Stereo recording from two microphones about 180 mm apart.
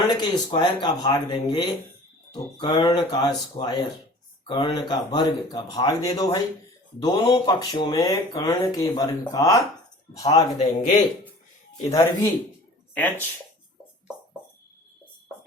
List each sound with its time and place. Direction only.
0.1 s speech: 25° left (ahead or behind)
10.6 s a man's voice: 45° left (ahead or behind)
11.9 s speech: 15° left (ahead or behind)